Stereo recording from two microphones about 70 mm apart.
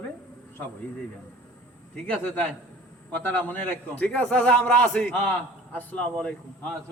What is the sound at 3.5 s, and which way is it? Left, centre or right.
A man's voice, left.